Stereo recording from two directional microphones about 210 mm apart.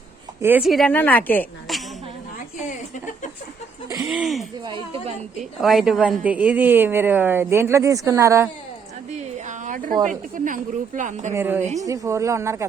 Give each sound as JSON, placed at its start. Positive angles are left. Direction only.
{"t": 0.4, "sound": "a woman's voice", "side_deg": -5}
{"t": 4.0, "sound": "a woman's voice", "side_deg": 0}
{"t": 4.6, "sound": "speech", "side_deg": -25}
{"t": 5.4, "sound": "a woman's voice", "side_deg": 0}
{"t": 9.1, "sound": "a sound", "side_deg": -35}
{"t": 10.0, "sound": "speech", "side_deg": -40}
{"t": 11.3, "sound": "a woman's voice", "side_deg": -10}